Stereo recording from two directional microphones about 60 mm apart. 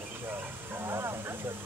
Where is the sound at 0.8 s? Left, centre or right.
Right.